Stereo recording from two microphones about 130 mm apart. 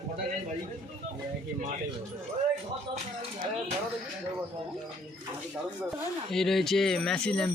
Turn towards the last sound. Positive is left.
turn(degrees=5)  # may be behind; listen again after turning